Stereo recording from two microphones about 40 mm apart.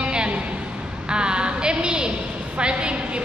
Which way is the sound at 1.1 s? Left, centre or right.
Right.